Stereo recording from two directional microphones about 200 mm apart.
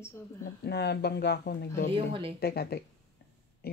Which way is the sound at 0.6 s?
55° left (ahead or behind).